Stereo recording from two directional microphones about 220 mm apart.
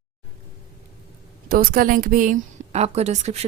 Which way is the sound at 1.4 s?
40° right (ahead or behind).